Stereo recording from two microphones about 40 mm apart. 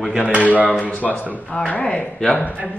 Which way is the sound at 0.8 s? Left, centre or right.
Left.